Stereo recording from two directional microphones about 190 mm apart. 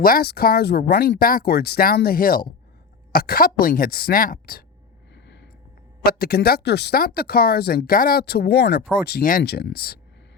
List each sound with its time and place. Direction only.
0.0 s speech: 55° left (ahead or behind)
5.1 s vehicle: 70° left (ahead or behind)
6.1 s speech: 50° left (ahead or behind)